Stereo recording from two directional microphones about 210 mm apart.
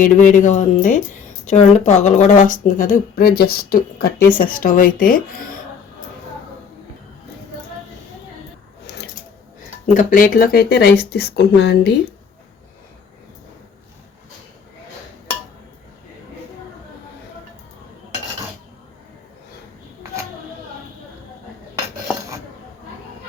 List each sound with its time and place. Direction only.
0.0 s speech: 35° left (ahead or behind)
9.8 s speech: 40° left (ahead or behind)